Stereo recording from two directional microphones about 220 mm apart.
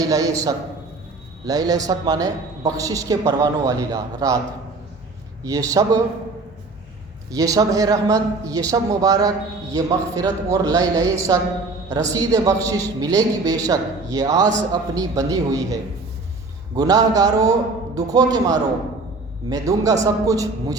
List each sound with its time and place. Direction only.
0.0 s a woman's voice: 15° right (ahead or behind)
5.4 s a woman's voice: 15° right (ahead or behind)
7.3 s a woman's voice: 15° right (ahead or behind)